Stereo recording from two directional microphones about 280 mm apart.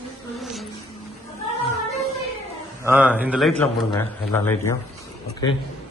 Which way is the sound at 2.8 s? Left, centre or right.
Centre.